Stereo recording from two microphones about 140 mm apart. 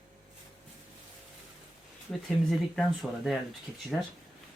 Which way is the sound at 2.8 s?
Centre (ahead or behind).